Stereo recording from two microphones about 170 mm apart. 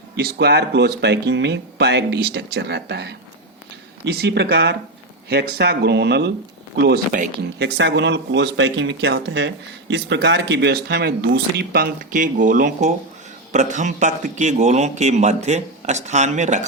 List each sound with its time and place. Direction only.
0.2 s speech: 70° right (ahead or behind)
6.7 s speech: 65° right (ahead or behind)
7.6 s a man's voice: 85° right; by 16.6 s 45° right (ahead or behind)